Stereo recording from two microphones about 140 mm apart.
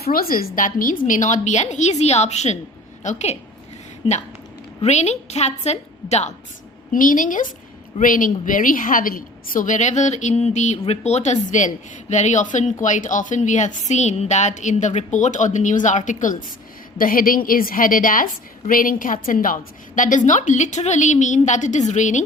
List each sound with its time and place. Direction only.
0.0 s a woman's voice: 90° left; by 3.3 s 55° left (ahead or behind)
4.8 s a woman's voice: 55° left (ahead or behind)
6.9 s a woman's voice: 75° left (ahead or behind)
17.0 s a woman's voice: 90° left; by 22.2 s 60° left (ahead or behind)